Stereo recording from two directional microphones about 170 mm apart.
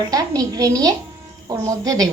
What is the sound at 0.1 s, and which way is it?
A woman's voice, 20° right (ahead or behind).